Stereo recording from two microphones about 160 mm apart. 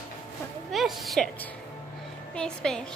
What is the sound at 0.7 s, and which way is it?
Speech, centre (ahead or behind).